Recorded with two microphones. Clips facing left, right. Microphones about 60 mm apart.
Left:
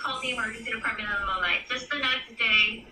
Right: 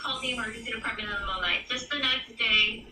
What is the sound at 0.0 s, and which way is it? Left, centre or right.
A woman's voice, left.